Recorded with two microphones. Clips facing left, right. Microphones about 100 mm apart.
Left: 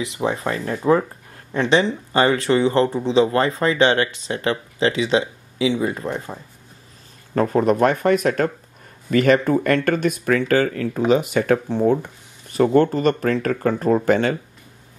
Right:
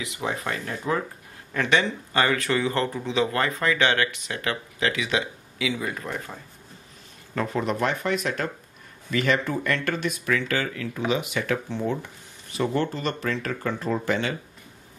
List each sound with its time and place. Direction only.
0.0 s speech: 30° left (ahead or behind)
7.3 s speech: 45° left (ahead or behind)